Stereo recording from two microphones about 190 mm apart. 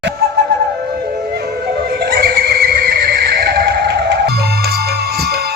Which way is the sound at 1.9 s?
55° right (ahead or behind).